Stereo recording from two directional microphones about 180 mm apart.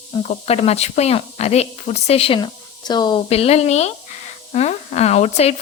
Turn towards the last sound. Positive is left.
turn(degrees=35)  # may be behind; listen again after turning